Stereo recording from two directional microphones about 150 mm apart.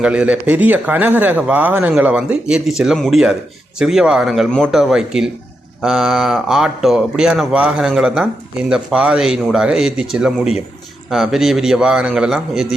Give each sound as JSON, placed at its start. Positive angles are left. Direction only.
{"t": 0.0, "sound": "a man's voice", "side_deg": -5}